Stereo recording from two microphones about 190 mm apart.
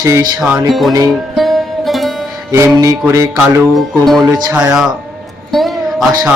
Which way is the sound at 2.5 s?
15° right (ahead or behind).